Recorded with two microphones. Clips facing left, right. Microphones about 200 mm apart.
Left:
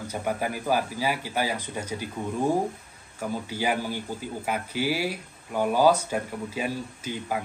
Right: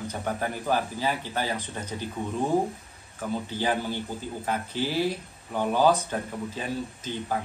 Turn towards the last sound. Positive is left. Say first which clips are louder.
# even
turn(degrees=10)  # may be behind; listen again after turning